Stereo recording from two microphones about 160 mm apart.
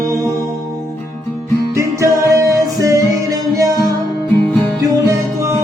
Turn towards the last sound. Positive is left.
turn(degrees=-20)  # may be behind; listen again after turning